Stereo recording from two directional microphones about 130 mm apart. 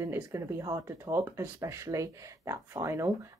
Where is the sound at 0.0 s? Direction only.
20° right (ahead or behind).